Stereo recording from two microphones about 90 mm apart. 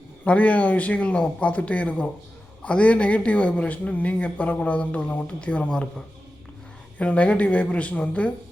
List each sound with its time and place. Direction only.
0.3 s speech: 15° left (ahead or behind)
7.0 s speech: 15° left (ahead or behind)